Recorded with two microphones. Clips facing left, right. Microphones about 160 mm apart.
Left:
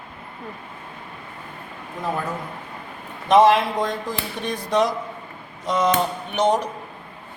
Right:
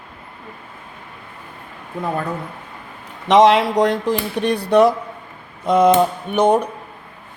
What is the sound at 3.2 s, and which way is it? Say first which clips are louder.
Speech: right 3 dB; 90° right.